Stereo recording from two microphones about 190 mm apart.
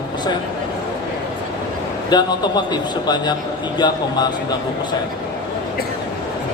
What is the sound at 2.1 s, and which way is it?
Speech, 20° left (ahead or behind).